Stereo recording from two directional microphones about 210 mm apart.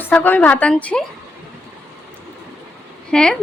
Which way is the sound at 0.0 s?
10° left (ahead or behind).